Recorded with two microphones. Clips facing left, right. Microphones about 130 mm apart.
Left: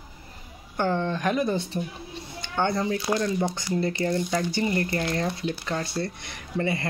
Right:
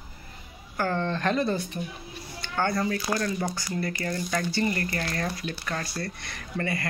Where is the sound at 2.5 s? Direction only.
20° left (ahead or behind).